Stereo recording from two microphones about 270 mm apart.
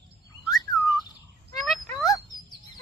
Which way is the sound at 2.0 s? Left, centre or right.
Centre.